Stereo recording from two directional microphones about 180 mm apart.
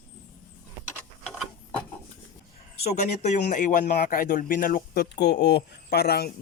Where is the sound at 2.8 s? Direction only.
40° left (ahead or behind); by 6.3 s 60° left (ahead or behind).